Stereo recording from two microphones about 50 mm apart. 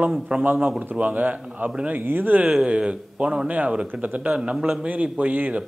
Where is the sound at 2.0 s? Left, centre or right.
Right.